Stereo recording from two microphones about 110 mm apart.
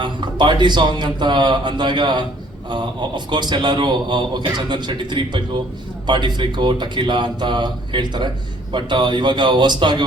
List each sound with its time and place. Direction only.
0.0 s a man's voice: 45° right (ahead or behind)